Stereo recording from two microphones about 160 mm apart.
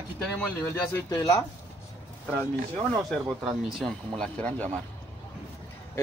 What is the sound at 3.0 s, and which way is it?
Speech, centre (ahead or behind).